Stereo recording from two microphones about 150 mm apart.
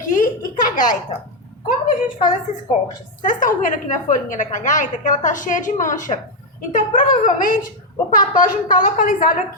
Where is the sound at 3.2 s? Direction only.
60° left (ahead or behind).